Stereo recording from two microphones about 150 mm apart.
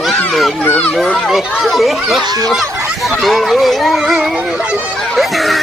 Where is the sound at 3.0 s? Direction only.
Centre (ahead or behind).